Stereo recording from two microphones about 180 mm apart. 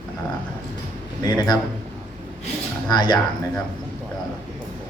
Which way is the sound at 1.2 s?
20° left (ahead or behind).